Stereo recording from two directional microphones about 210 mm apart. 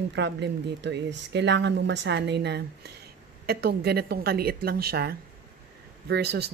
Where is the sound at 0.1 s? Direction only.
55° right (ahead or behind).